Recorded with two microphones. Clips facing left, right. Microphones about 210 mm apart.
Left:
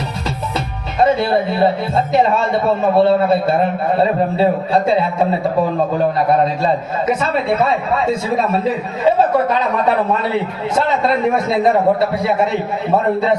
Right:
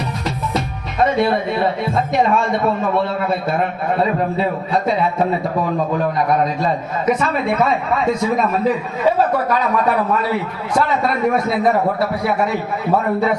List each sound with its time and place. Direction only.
0.5 s speech: 30° left (ahead or behind)
6.1 s speech: 30° left (ahead or behind)